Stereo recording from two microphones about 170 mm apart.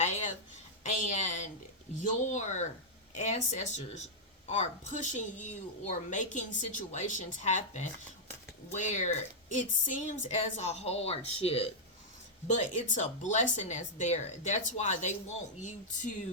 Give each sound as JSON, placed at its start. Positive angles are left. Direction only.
{"t": 0.0, "sound": "a sound", "side_deg": 45}
{"t": 0.9, "sound": "a woman's voice", "side_deg": 45}
{"t": 12.5, "sound": "speech", "side_deg": 45}